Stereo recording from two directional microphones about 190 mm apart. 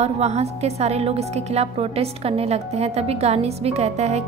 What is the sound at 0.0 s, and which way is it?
Speech, 35° right (ahead or behind).